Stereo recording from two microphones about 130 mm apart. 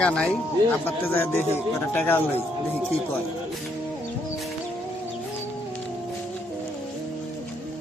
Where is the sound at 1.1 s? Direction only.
20° left (ahead or behind).